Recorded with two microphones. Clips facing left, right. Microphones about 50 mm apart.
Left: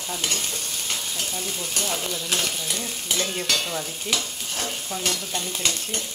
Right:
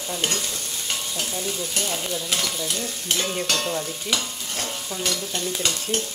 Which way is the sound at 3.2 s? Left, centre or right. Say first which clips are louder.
Even; centre.